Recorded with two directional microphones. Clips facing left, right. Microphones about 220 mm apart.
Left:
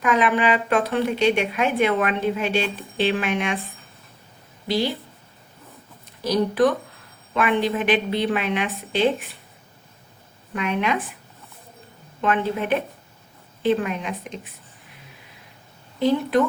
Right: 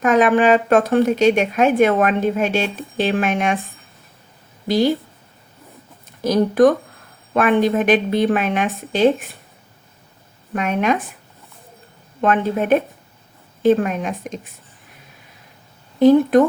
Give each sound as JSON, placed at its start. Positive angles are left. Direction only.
{"t": 0.0, "sound": "speech", "side_deg": -45}
{"t": 6.2, "sound": "speech", "side_deg": -45}
{"t": 10.5, "sound": "speech", "side_deg": -45}
{"t": 12.2, "sound": "speech", "side_deg": -45}
{"t": 16.0, "sound": "speech", "side_deg": -45}